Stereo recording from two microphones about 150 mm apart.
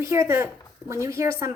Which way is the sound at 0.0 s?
20° right (ahead or behind).